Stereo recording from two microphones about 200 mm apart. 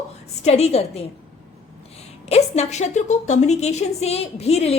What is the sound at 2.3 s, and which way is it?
A woman's voice, 35° left (ahead or behind).